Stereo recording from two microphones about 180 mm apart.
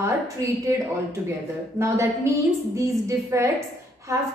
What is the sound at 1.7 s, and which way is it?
A woman's voice, 15° right (ahead or behind).